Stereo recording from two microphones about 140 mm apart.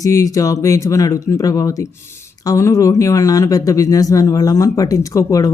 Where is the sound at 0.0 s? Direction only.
25° left (ahead or behind).